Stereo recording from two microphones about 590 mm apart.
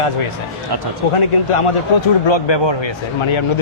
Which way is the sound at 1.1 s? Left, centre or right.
Left.